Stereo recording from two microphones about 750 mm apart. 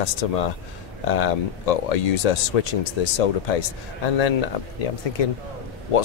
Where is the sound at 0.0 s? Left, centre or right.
Left.